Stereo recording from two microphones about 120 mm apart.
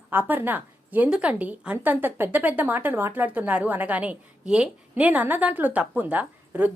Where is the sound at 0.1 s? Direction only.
15° right (ahead or behind).